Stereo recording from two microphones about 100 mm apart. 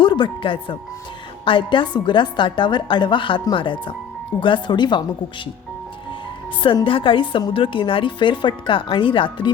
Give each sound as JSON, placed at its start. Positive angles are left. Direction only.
{"t": 0.0, "sound": "a woman's voice", "side_deg": 55}
{"t": 6.8, "sound": "speech", "side_deg": 60}